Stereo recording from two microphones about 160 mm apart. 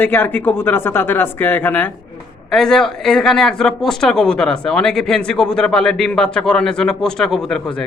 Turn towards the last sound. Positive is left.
turn(degrees=5)  # may be behind; listen again after turning